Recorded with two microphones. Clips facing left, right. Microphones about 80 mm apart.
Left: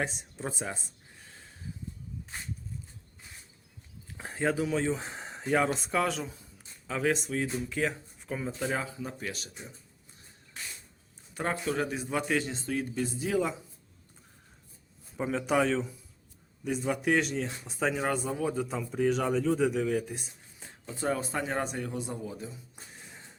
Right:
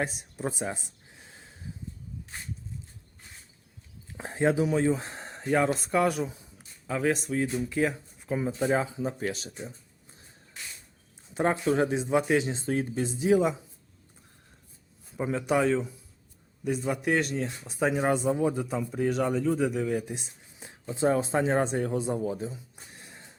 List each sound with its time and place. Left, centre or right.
0.0 s a man's voice: centre
0.6 s speech: centre
1.2 s a sound: centre
4.2 s speech: centre
4.9 s a man's voice: centre
9.0 s speech: right
11.3 s speech: right
12.6 s speech: right; by 13.6 s centre
15.2 s a man's voice: centre
20.1 s speech: centre; by 22.5 s right
22.9 s music: centre